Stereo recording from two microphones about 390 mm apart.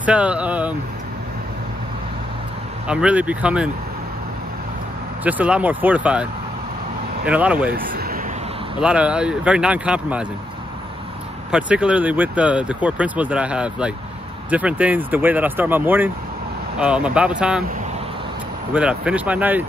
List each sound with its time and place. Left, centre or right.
0.0 s speech: centre
2.9 s speech: centre
5.2 s speech: centre
7.2 s speech: centre
7.7 s speech: right
8.8 s speech: centre
11.5 s speech: centre
18.7 s speech: centre